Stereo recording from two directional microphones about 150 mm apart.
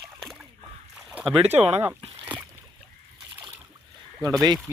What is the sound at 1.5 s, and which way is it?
Speech, 45° right (ahead or behind).